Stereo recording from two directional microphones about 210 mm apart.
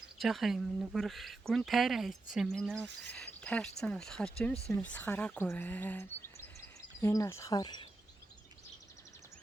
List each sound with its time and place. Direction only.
0.2 s speech: centre (ahead or behind); by 7.9 s 20° left (ahead or behind)